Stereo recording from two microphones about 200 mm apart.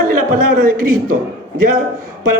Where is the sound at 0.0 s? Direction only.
45° right (ahead or behind).